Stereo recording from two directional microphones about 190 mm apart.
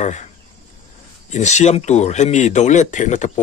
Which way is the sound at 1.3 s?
35° left (ahead or behind).